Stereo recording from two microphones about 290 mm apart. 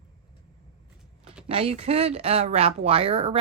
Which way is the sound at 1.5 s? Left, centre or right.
Centre.